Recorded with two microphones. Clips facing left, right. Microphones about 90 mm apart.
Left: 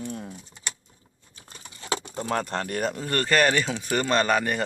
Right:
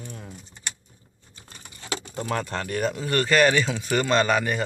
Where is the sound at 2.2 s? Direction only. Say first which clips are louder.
Left 1 dB; 35° left (ahead or behind).